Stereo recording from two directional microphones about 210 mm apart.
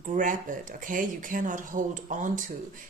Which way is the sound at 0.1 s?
40° right (ahead or behind).